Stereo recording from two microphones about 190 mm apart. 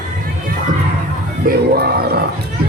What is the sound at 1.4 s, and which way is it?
Crowd, 55° right (ahead or behind).